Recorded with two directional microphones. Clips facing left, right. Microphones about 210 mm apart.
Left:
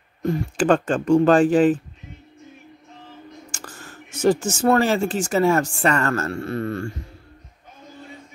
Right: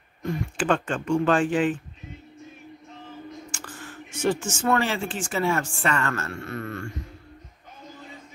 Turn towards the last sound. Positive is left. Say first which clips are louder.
# left 7 dB
turn(degrees=35)  # may be behind; listen again after turning